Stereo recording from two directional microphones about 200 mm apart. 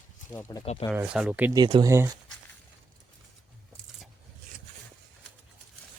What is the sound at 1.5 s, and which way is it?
Speech, 20° right (ahead or behind).